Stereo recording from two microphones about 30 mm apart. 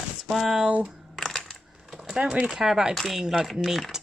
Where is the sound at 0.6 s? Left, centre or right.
Right.